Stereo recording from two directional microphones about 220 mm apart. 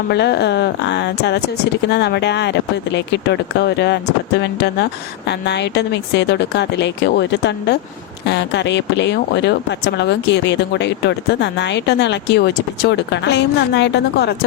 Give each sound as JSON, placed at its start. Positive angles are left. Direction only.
{"t": 0.1, "sound": "speech", "side_deg": 50}